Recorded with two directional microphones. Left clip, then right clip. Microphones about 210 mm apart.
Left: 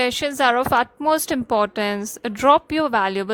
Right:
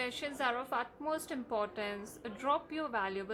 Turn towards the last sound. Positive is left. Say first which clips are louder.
# left 16 dB
turn(degrees=50)  # may be behind; listen again after turning